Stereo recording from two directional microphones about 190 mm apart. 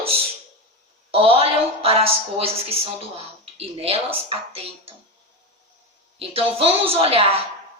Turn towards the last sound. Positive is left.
turn(degrees=-30)  # may be behind; listen again after turning